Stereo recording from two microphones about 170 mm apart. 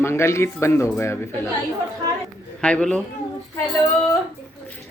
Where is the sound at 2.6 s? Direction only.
5° left (ahead or behind).